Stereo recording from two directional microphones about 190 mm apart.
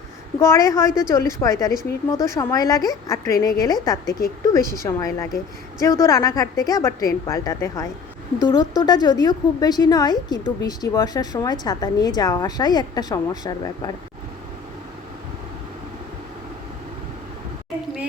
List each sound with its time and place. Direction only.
0.3 s a woman's voice: 15° left (ahead or behind)